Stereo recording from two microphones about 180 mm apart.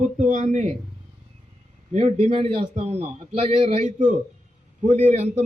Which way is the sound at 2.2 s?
30° right (ahead or behind).